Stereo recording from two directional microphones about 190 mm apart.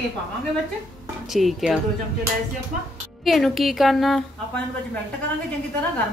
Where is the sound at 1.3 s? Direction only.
Centre (ahead or behind).